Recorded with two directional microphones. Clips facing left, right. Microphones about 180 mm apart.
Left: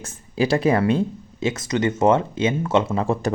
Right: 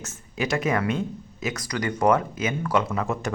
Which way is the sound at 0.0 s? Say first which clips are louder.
Left 7 dB; 30° left (ahead or behind).